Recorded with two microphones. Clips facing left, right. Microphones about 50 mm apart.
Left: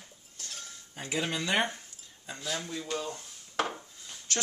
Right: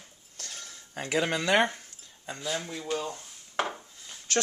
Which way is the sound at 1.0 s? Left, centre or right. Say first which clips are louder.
Right 5 dB; right.